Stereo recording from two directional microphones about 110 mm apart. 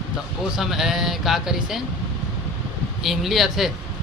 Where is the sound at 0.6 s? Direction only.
5° right (ahead or behind).